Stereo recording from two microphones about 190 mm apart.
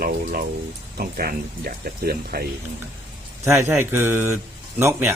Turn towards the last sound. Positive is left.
turn(degrees=-15)  # may be behind; listen again after turning